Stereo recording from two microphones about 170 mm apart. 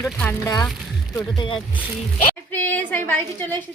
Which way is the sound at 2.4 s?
10° left (ahead or behind).